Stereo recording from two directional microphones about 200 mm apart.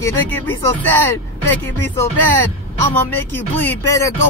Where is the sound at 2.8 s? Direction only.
10° left (ahead or behind).